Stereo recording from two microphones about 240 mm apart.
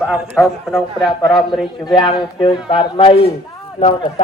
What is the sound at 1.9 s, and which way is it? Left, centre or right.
Speech, centre.